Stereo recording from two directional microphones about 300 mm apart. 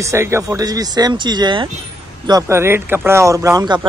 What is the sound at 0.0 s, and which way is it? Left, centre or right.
Speech, centre.